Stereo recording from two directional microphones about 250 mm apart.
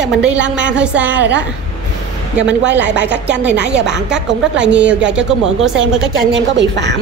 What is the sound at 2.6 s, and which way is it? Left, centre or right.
Speech, right.